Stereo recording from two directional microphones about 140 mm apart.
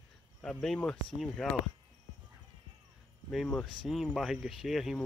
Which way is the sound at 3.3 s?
Centre (ahead or behind).